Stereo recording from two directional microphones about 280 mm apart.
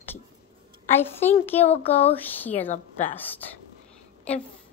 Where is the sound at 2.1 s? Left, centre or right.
Centre.